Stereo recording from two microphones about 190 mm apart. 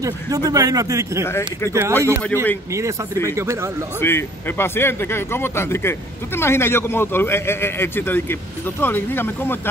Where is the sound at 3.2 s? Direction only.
15° right (ahead or behind).